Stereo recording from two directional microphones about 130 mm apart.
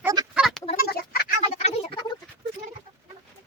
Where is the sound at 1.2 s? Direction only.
60° left (ahead or behind).